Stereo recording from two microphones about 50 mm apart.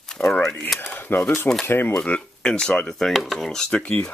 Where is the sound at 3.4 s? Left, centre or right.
Centre.